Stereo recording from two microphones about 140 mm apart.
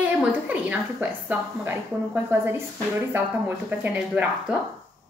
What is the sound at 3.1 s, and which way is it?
A woman's voice, 15° right (ahead or behind).